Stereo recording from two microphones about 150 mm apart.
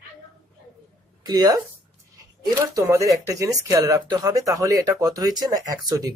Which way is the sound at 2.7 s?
20° right (ahead or behind).